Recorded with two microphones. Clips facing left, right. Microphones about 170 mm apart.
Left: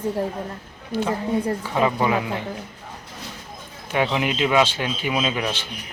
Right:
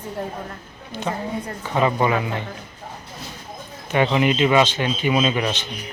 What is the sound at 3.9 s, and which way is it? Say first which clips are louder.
A man's voice: right 4 dB; 5° left (ahead or behind).